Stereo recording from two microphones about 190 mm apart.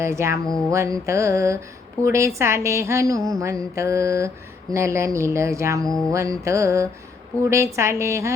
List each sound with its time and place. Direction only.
0.0 s mantra: 15° right (ahead or behind)
5.8 s mantra: 5° left (ahead or behind)
6.1 s mantra: 15° right (ahead or behind)